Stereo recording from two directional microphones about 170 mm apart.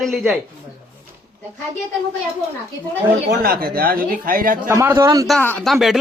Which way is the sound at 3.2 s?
60° right (ahead or behind).